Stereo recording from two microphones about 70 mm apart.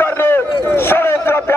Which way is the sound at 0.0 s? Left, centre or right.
Left.